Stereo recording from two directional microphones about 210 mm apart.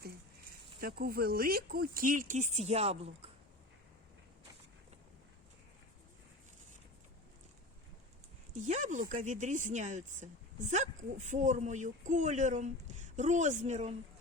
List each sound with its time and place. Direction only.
0.8 s speech: 45° right (ahead or behind); by 3.2 s 30° right (ahead or behind)
8.5 s speech: 35° right (ahead or behind)